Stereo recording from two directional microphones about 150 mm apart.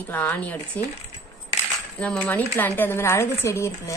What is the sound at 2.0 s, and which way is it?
Speech, 10° left (ahead or behind).